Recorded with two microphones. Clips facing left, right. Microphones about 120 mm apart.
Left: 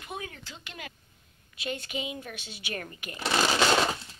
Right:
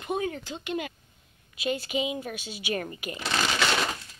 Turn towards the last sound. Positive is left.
turn(degrees=30)  # may be behind; listen again after turning